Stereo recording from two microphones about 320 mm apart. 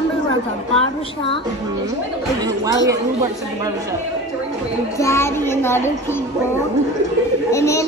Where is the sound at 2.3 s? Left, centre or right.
Centre.